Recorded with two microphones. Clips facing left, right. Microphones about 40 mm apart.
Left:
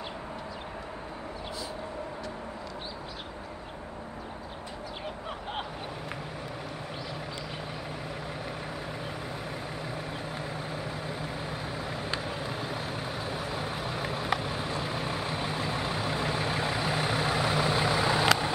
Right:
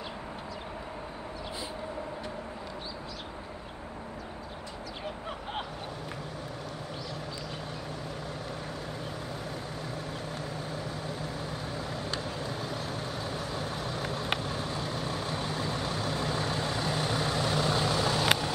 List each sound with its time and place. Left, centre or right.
9.9 s vehicle: centre